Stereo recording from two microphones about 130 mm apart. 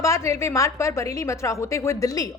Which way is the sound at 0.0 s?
20° left (ahead or behind).